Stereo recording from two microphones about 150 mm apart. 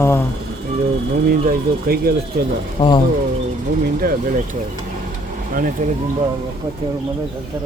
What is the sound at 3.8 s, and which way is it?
Speech, 70° right (ahead or behind).